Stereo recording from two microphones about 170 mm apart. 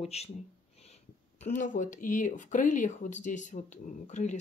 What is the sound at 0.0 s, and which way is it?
Speech, 40° left (ahead or behind).